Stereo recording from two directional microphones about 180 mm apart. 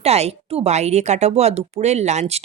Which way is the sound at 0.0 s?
35° right (ahead or behind).